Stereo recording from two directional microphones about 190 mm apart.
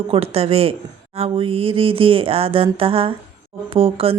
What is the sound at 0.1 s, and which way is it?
A woman's voice, 30° right (ahead or behind).